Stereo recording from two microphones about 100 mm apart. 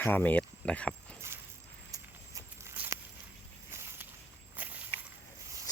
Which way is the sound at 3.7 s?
25° right (ahead or behind).